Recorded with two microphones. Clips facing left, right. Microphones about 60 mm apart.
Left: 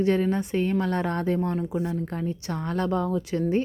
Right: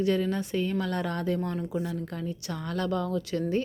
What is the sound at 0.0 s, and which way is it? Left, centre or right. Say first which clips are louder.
A woman's voice: left 3 dB; left.